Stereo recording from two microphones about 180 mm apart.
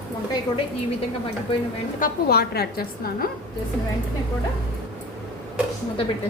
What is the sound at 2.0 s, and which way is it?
A woman's voice, 60° left (ahead or behind).